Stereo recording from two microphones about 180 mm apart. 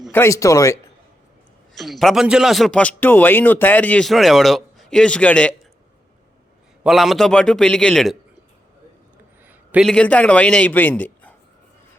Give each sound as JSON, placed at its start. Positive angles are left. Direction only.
{"t": 0.1, "sound": "a man's voice", "side_deg": 15}
{"t": 1.7, "sound": "a man's voice", "side_deg": 0}
{"t": 6.8, "sound": "a man's voice", "side_deg": 0}
{"t": 9.5, "sound": "a sound", "side_deg": -5}
{"t": 9.9, "sound": "a man's voice", "side_deg": 5}